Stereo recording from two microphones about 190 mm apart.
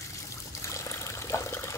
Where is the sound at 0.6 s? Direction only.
15° left (ahead or behind).